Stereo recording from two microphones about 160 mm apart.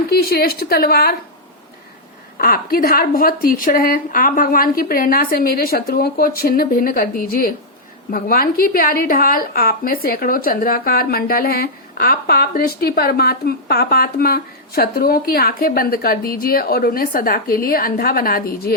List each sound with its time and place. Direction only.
0.1 s a woman's voice: 75° left (ahead or behind)
2.4 s a woman's voice: 65° left (ahead or behind)